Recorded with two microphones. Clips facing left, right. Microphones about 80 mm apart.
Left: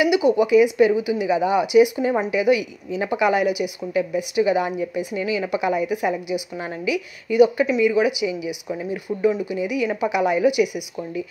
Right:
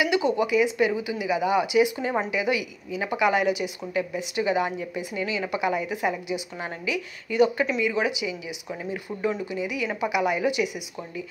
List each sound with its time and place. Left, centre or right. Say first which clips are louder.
0.1 s speech: left 6 dB; centre